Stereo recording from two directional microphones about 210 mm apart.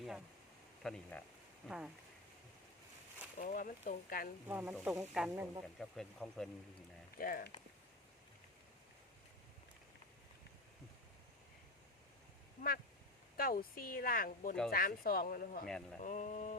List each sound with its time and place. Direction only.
0.8 s speech: 5° left (ahead or behind)
3.3 s speech: 40° left (ahead or behind)
4.4 s speech: 10° right (ahead or behind)
5.3 s speech: 15° right (ahead or behind)
5.6 s speech: centre (ahead or behind)
7.2 s speech: 45° left (ahead or behind)
13.3 s speech: 45° left (ahead or behind)
15.6 s speech: 5° left (ahead or behind)
16.0 s speech: 35° left (ahead or behind)